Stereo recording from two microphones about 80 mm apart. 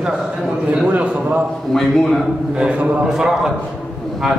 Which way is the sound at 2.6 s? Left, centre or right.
Centre.